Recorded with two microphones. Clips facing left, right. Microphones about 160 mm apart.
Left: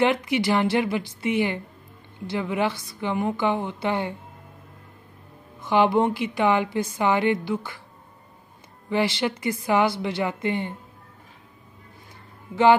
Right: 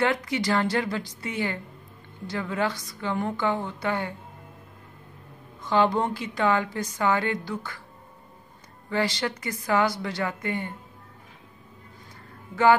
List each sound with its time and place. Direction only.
0.0 s a woman's voice: 20° left (ahead or behind)
5.6 s a woman's voice: 20° left (ahead or behind)
8.9 s a woman's voice: 20° left (ahead or behind)